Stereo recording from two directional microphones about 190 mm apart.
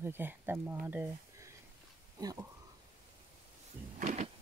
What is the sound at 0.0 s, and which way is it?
Speech, 10° right (ahead or behind).